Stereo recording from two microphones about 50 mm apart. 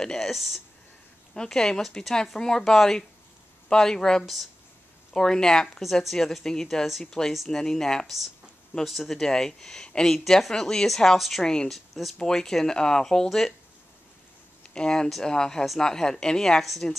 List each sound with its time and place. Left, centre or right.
0.0 s speech: centre
1.3 s speech: centre
5.8 s speech: centre
8.8 s speech: centre
11.1 s speech: centre
11.4 s speech: centre
11.7 s speech: centre
12.2 s speech: centre
14.7 s speech: centre